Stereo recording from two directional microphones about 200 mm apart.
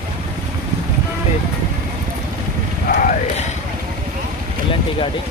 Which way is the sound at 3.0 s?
40° left (ahead or behind).